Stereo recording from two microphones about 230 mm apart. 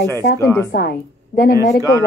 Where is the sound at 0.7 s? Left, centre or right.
Left.